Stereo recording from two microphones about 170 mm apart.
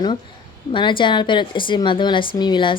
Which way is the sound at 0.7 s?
30° left (ahead or behind).